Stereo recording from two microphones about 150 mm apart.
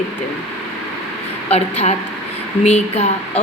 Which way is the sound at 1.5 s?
45° left (ahead or behind).